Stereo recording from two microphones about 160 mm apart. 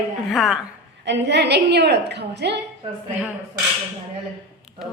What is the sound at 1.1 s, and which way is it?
A woman's voice, 90° right.